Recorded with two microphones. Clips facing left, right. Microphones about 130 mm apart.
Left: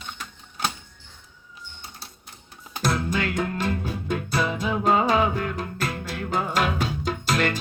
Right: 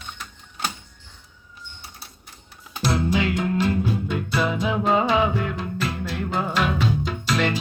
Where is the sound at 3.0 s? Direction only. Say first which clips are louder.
Right 3 dB; 45° left (ahead or behind).